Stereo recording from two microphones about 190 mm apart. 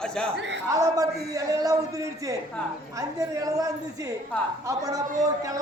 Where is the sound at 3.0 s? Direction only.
20° right (ahead or behind).